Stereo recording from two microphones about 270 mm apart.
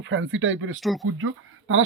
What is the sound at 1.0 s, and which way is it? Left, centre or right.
Speech, right.